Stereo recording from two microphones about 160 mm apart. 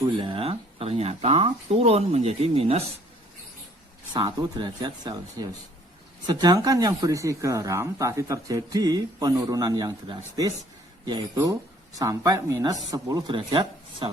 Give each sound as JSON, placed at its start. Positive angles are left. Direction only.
{"t": 0.2, "sound": "speech", "side_deg": -35}
{"t": 4.1, "sound": "speech", "side_deg": -25}